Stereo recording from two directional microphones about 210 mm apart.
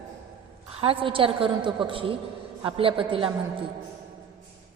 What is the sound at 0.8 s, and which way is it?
A woman's voice, 25° right (ahead or behind).